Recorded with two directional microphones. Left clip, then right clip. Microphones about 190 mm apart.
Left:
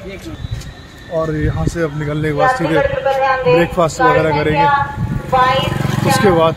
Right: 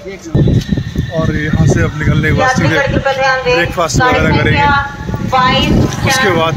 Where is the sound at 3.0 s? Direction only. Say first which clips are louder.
Right 2 dB; 45° left (ahead or behind).